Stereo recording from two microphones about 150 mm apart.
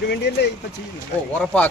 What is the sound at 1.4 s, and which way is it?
Speech, 10° left (ahead or behind).